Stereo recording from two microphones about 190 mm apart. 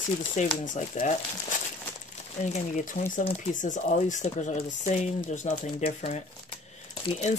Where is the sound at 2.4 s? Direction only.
40° left (ahead or behind).